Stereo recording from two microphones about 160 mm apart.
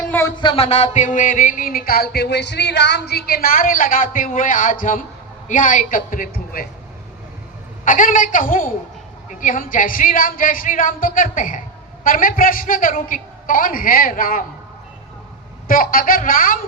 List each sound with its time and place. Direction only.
0.4 s music: 40° left (ahead or behind); by 6.7 s 60° left (ahead or behind)
7.9 s music: 55° left (ahead or behind)
15.6 s music: 65° left (ahead or behind)